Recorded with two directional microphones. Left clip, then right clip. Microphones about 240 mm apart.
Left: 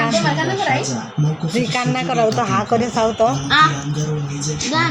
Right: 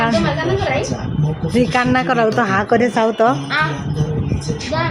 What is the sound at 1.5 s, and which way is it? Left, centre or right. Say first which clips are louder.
Speech: right 5 dB; right.